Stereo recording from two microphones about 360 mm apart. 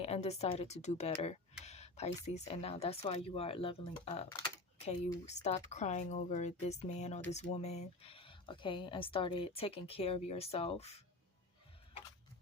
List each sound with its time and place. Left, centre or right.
0.0 s speech: centre